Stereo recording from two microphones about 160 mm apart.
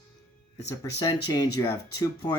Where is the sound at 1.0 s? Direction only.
25° left (ahead or behind).